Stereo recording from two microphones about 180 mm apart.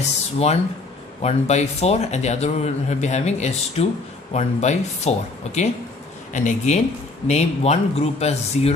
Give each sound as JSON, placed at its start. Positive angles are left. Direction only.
{"t": 0.3, "sound": "a man's voice", "side_deg": 35}